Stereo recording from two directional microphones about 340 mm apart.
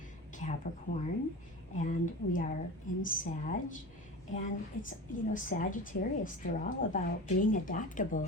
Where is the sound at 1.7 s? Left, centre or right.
Left.